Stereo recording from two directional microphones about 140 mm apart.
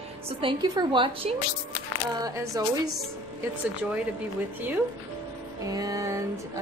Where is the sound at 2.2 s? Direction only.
25° right (ahead or behind).